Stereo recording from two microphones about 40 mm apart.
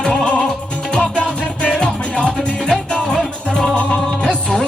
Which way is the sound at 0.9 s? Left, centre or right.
Left.